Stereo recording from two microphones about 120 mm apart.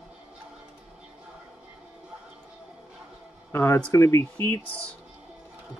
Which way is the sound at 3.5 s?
20° left (ahead or behind).